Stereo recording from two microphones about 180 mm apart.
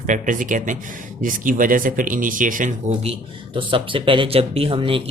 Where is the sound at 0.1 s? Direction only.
45° right (ahead or behind).